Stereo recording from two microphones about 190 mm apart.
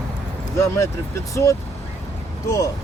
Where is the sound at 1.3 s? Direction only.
15° left (ahead or behind).